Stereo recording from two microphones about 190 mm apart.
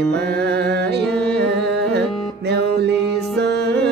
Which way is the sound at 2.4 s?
60° right (ahead or behind).